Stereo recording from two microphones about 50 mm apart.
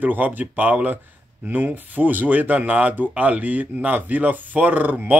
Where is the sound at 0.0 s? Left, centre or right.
Right.